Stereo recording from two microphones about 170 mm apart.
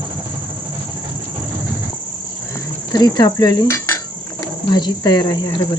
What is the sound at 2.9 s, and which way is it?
Cutlery, 25° left (ahead or behind).